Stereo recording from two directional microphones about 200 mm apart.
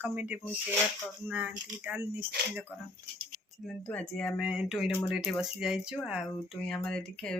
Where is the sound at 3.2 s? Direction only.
45° right (ahead or behind).